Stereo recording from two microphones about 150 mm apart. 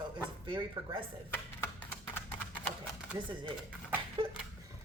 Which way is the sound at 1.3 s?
15° left (ahead or behind).